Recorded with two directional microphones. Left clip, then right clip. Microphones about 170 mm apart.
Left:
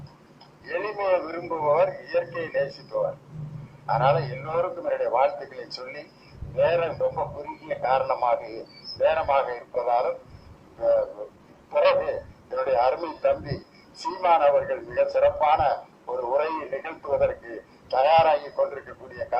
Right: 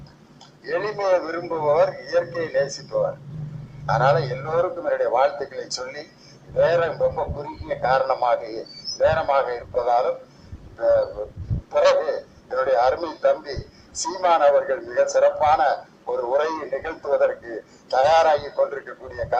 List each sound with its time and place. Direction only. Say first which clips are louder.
0.6 s a man's voice: right 4 dB; 15° right (ahead or behind)